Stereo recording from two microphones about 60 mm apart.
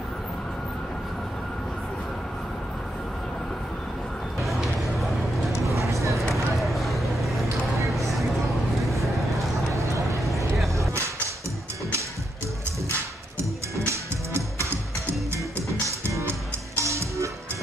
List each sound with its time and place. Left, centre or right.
4.4 s music: centre
5.7 s a sound: right
6.5 s a sound: centre
9.8 s vehicle: right
13.7 s music: right
16.3 s music: right